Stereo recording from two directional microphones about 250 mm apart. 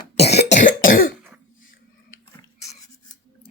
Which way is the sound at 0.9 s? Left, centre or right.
Left.